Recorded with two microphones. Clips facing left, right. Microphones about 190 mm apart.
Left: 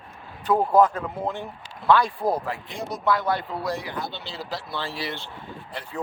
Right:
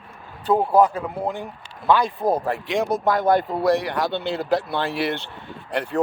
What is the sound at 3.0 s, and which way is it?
Speech, 50° right (ahead or behind).